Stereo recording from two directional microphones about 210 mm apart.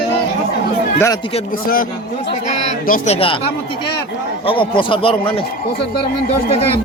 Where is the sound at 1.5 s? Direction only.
45° left (ahead or behind); by 5.5 s 25° left (ahead or behind).